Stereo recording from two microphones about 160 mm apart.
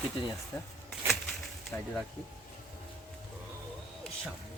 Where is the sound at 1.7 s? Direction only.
10° left (ahead or behind).